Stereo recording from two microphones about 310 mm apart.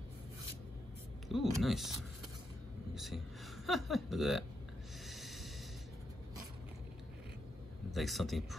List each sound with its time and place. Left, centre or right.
1.3 s speech: centre
2.9 s a sound: centre
3.6 s speech: centre
5.0 s snort: centre
7.9 s speech: centre